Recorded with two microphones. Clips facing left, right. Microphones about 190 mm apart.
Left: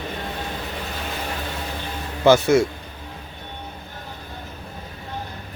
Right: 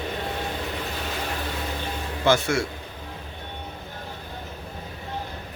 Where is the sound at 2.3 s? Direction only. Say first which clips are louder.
Left 7 dB; 20° left (ahead or behind).